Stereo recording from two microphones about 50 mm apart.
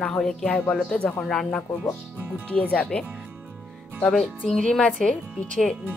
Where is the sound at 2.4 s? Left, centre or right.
Left.